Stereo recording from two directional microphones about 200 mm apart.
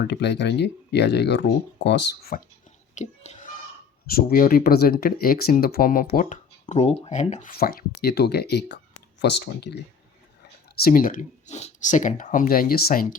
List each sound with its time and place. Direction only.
0.1 s speech: 55° left (ahead or behind)
2.9 s whispering: 35° left (ahead or behind)
4.0 s speech: 50° left (ahead or behind)
10.8 s speech: 45° left (ahead or behind)